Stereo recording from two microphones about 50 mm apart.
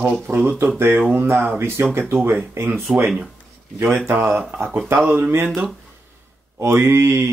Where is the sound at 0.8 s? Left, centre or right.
Right.